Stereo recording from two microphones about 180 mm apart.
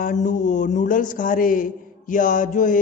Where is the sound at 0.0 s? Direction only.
45° left (ahead or behind).